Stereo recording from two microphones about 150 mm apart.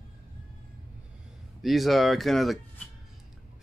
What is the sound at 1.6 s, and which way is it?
Speech, centre (ahead or behind).